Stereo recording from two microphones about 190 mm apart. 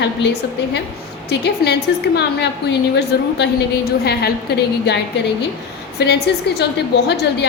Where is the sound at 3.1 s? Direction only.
55° left (ahead or behind).